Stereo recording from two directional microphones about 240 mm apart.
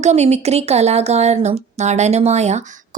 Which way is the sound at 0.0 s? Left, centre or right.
Right.